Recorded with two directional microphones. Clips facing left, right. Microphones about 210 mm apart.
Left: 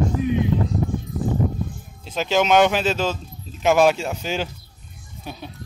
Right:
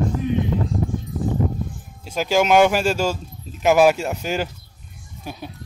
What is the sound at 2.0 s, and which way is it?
Speech, 10° right (ahead or behind).